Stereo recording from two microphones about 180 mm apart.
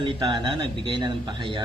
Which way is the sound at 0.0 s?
25° right (ahead or behind).